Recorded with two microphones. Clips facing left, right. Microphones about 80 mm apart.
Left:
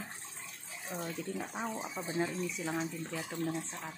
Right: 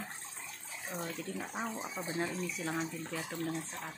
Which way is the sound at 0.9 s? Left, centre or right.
Centre.